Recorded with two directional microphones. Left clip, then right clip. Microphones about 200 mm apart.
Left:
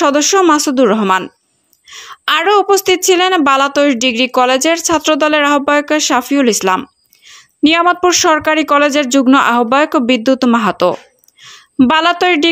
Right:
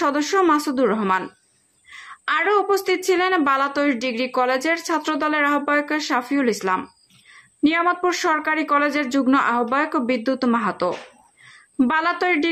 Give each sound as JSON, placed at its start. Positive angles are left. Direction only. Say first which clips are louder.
{"t": 0.0, "sound": "a woman's voice", "louder": "left 9 dB", "side_deg": 35}